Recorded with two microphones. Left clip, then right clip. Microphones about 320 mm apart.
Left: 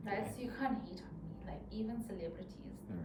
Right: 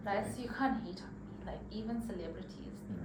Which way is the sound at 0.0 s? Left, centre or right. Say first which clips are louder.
Right 4 dB; centre.